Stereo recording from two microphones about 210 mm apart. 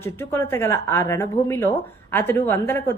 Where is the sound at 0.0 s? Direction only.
10° left (ahead or behind).